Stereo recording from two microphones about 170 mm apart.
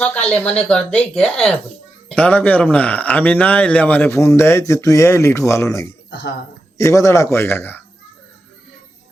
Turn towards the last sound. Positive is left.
turn(degrees=10)  # may be behind; listen again after turning